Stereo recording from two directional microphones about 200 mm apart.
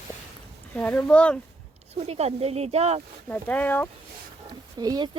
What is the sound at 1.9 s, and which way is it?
Speech, 30° right (ahead or behind).